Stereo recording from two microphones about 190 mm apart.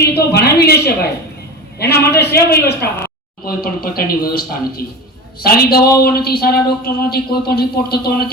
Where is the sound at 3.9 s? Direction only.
50° left (ahead or behind).